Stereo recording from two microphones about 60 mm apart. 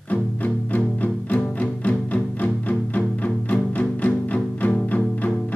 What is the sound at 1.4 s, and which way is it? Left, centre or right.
Music, centre.